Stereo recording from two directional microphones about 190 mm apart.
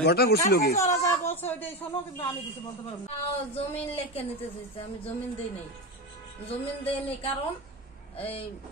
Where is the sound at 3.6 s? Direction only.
30° left (ahead or behind).